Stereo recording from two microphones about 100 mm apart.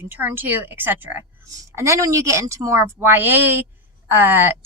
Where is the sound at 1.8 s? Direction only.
30° right (ahead or behind).